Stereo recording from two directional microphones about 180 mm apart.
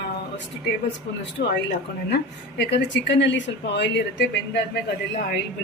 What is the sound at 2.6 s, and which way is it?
Speech, 70° left (ahead or behind).